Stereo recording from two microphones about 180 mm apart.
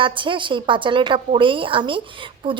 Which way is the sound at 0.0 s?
25° right (ahead or behind).